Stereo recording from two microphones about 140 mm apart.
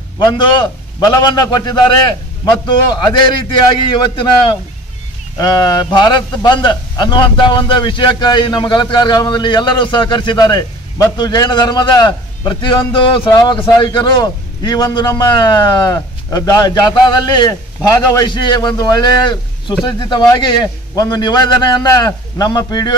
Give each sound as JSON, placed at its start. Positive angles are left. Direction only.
{"t": 0.2, "sound": "a man's voice", "side_deg": 35}